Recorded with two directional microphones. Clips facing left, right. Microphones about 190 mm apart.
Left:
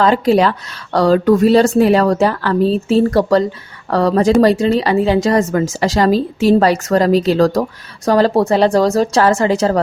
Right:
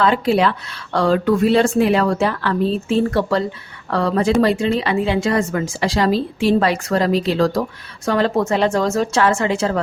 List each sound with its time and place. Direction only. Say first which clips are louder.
0.0 s a woman's voice: left 4 dB; 40° left (ahead or behind)